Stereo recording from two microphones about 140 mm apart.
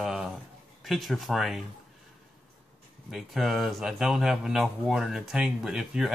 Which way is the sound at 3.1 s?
Centre (ahead or behind).